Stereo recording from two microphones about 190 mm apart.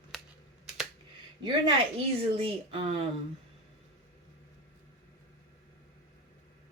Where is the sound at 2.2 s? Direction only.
30° right (ahead or behind).